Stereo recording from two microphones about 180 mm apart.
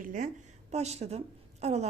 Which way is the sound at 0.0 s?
45° right (ahead or behind).